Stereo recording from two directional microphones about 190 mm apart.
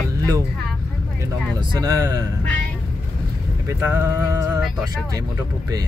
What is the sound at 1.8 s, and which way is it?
Speech, 15° right (ahead or behind).